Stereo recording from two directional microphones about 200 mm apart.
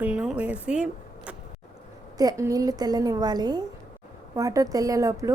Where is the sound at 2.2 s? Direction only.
15° right (ahead or behind).